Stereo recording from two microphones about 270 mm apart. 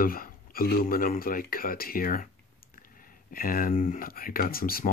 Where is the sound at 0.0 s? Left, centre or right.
Left.